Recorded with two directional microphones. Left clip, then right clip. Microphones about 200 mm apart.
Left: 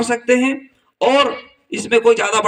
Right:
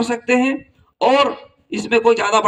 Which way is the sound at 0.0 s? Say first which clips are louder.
Left 2 dB; 40° right (ahead or behind).